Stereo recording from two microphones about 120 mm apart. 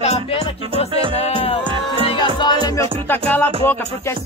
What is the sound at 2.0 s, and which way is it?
Music, 40° left (ahead or behind).